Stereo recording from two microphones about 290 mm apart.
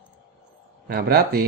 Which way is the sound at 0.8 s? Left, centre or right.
Right.